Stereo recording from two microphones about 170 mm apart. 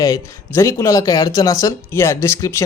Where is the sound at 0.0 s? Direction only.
20° left (ahead or behind).